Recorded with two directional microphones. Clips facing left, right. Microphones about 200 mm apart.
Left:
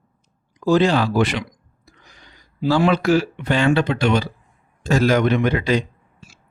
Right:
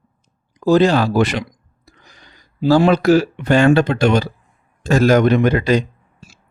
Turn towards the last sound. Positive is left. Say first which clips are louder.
# right 2 dB
turn(degrees=-40)  # may be behind; listen again after turning